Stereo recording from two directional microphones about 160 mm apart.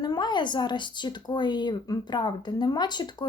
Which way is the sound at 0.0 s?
25° left (ahead or behind).